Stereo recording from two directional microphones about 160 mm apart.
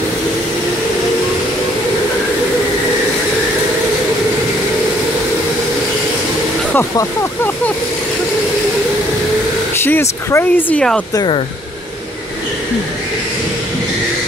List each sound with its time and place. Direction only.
6.7 s hiss: 15° left (ahead or behind)
9.8 s speech: 15° left (ahead or behind)
11.1 s speech: 30° left (ahead or behind)